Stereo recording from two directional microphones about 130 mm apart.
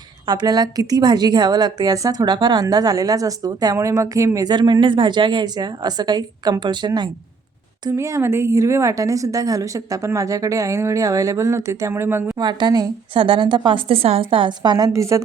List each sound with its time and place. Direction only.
0.3 s a woman's voice: 30° right (ahead or behind)
7.9 s a woman's voice: 20° right (ahead or behind)
12.4 s a woman's voice: 35° right (ahead or behind)